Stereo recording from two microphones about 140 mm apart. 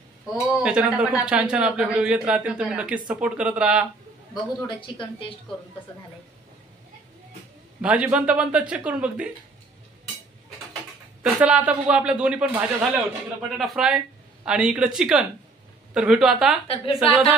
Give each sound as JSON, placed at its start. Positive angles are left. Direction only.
{"t": 0.3, "sound": "speech", "side_deg": 0}
{"t": 4.6, "sound": "a woman's voice", "side_deg": 35}
{"t": 7.8, "sound": "speech", "side_deg": -10}
{"t": 11.2, "sound": "speech", "side_deg": -10}
{"t": 16.6, "sound": "a woman's voice", "side_deg": 40}